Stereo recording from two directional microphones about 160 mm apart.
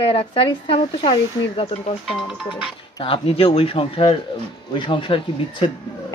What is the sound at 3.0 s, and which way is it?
A woman's voice, 35° left (ahead or behind).